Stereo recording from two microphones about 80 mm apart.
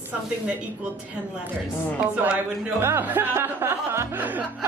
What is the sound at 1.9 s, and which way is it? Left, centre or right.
Speech, centre.